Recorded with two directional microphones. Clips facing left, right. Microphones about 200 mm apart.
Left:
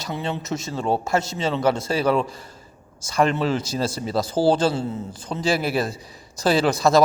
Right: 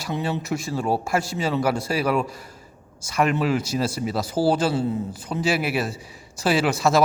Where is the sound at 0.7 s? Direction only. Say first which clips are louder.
Left 2 dB; 5° right (ahead or behind).